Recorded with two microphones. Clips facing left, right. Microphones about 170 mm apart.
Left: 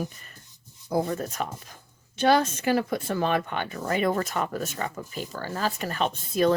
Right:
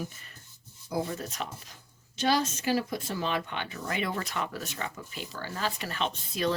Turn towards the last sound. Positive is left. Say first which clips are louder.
# left 7 dB
turn(degrees=50)  # may be behind; listen again after turning